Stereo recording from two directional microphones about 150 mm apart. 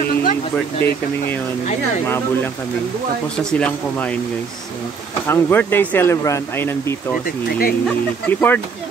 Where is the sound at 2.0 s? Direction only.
15° left (ahead or behind).